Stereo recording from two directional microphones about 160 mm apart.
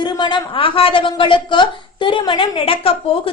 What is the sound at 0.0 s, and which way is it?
A woman's voice, 30° left (ahead or behind).